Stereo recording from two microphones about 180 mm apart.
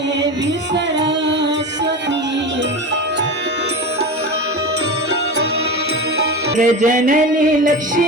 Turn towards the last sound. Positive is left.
turn(degrees=-45)  # may be behind; listen again after turning